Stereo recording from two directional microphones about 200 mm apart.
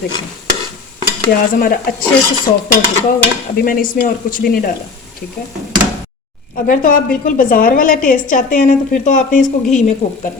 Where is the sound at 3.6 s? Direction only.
45° left (ahead or behind).